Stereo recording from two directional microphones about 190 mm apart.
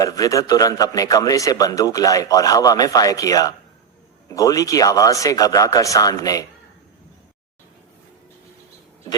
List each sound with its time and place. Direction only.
0.0 s a man's voice: 20° left (ahead or behind)